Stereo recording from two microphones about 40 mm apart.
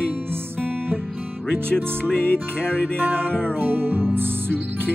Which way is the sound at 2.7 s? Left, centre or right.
Right.